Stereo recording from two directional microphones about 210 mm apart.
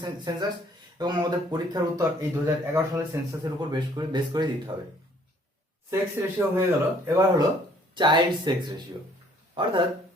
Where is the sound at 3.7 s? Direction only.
20° right (ahead or behind).